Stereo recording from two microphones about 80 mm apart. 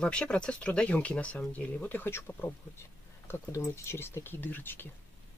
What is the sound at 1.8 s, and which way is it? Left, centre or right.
Speech, left.